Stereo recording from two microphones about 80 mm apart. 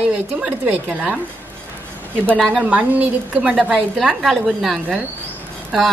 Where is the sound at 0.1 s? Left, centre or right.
Right.